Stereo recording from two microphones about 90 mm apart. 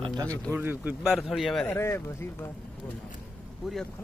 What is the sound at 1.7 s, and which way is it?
Speech, 25° left (ahead or behind).